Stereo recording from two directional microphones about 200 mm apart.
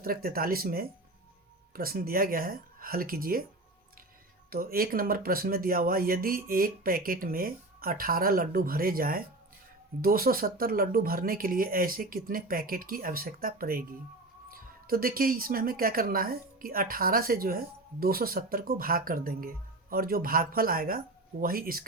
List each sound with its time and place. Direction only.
0.0 s speech: 50° right (ahead or behind)
4.4 s speech: 45° right (ahead or behind)